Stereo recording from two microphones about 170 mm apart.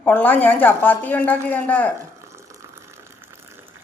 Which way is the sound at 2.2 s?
15° right (ahead or behind).